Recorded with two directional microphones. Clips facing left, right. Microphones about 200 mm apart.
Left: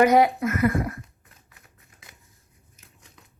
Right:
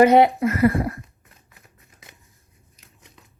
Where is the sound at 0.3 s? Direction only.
35° right (ahead or behind).